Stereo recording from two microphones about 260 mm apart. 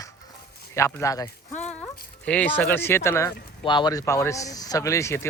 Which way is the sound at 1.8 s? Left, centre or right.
Centre.